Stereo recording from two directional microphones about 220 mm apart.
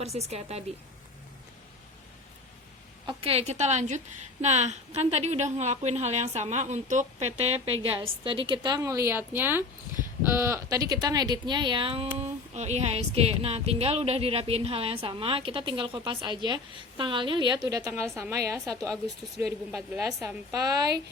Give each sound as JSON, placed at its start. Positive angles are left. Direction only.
{"t": 0.0, "sound": "speech", "side_deg": -30}
{"t": 3.1, "sound": "a woman's voice", "side_deg": -25}